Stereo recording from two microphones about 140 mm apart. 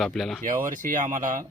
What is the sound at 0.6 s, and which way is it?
Speech, 70° right (ahead or behind).